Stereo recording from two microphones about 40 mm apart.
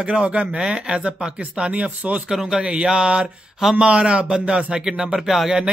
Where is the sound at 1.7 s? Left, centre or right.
Right.